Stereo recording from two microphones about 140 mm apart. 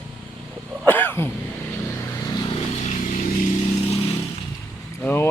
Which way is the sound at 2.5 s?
50° left (ahead or behind).